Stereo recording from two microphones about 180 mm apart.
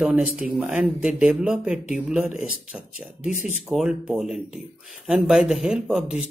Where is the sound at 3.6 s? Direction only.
5° right (ahead or behind).